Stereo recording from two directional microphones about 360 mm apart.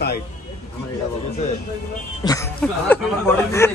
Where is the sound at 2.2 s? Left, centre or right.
Centre.